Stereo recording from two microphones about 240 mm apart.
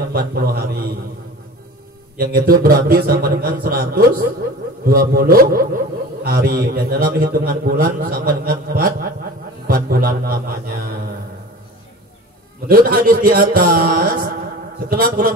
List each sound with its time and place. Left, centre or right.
0.0 s a man's voice: right
2.1 s a man's voice: right
12.6 s a man's voice: right